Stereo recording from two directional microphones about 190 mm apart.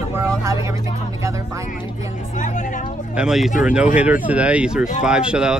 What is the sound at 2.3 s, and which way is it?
Speech, 40° left (ahead or behind).